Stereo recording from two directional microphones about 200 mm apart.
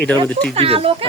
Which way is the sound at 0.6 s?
30° right (ahead or behind).